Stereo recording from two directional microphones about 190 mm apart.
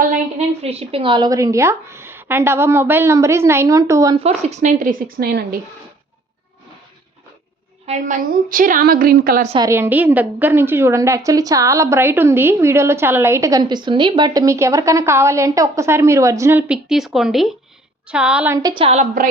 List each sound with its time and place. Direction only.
0.3 s a woman's voice: 30° right (ahead or behind); by 4.2 s 15° right (ahead or behind)
4.4 s a woman's voice: 40° right (ahead or behind); by 5.5 s 55° right (ahead or behind)
7.9 s a woman's voice: 40° right (ahead or behind)
9.6 s a woman's voice: 10° right (ahead or behind)
18.5 s a woman's voice: 20° right (ahead or behind)